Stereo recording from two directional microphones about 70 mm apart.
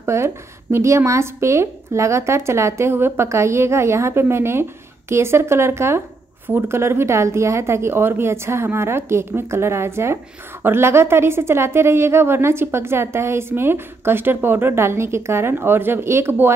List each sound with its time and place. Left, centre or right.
0.0 s a woman's voice: right